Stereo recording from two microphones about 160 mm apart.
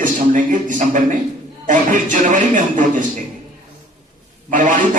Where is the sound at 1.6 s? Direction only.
55° right (ahead or behind).